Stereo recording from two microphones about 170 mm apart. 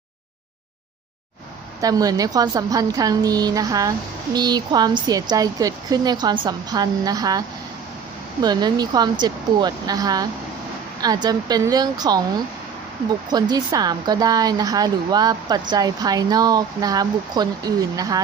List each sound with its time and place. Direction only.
1.8 s a woman's voice: 20° right (ahead or behind)
13.3 s a woman's voice: 25° right (ahead or behind)